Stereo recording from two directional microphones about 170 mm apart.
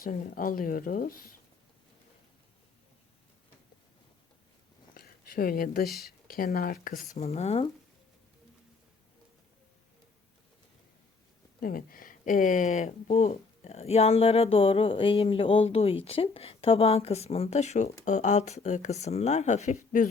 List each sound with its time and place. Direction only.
0.0 s speech: 55° left (ahead or behind)
4.9 s speech: 60° left (ahead or behind); by 7.7 s 40° left (ahead or behind)
11.6 s speech: 60° left (ahead or behind)